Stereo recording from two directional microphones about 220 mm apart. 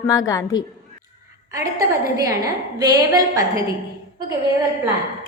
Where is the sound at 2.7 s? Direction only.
15° right (ahead or behind).